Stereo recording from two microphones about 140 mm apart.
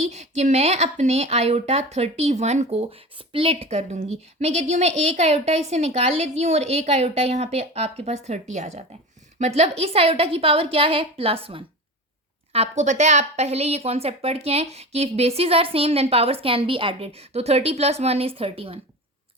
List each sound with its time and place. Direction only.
0.0 s speech: 50° right (ahead or behind)
12.5 s speech: 55° right (ahead or behind)